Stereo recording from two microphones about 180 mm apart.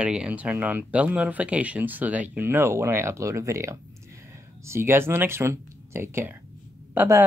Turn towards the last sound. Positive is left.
turn(degrees=-15)  # may be behind; listen again after turning